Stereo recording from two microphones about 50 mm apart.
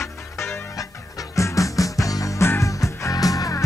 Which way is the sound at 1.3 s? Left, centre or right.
Left.